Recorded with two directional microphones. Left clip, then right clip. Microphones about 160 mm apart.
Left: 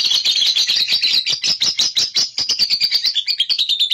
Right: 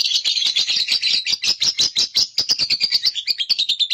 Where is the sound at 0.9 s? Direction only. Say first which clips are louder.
Left 3 dB; 20° right (ahead or behind).